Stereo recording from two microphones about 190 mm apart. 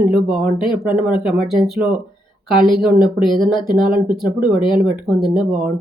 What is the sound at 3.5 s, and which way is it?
Speech, 25° left (ahead or behind).